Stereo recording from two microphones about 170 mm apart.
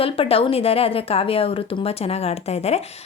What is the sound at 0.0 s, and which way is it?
A woman's voice, 35° left (ahead or behind).